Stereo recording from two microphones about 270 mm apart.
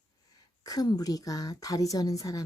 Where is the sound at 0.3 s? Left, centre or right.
Centre.